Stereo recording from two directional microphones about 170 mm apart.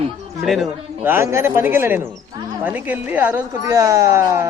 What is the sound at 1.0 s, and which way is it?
Speech, 15° right (ahead or behind).